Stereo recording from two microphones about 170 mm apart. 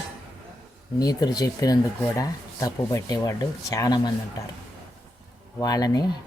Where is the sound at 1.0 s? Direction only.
25° left (ahead or behind).